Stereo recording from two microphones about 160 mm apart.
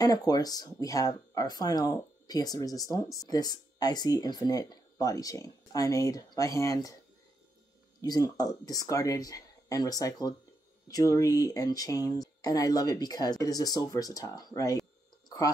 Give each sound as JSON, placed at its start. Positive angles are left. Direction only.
{"t": 0.0, "sound": "speech", "side_deg": 25}
{"t": 8.0, "sound": "speech", "side_deg": 25}